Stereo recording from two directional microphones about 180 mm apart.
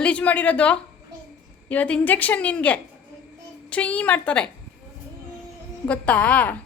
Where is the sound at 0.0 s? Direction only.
5° left (ahead or behind).